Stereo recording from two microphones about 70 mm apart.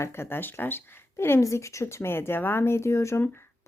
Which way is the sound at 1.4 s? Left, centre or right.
Left.